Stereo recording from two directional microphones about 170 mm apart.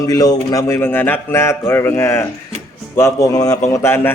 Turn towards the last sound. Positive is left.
turn(degrees=15)  # may be behind; listen again after turning